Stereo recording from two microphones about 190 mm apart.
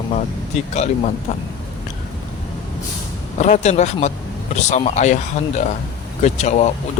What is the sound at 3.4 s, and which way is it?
Speech, 35° left (ahead or behind).